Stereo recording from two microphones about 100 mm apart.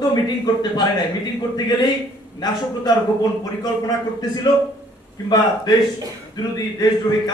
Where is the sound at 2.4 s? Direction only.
45° left (ahead or behind).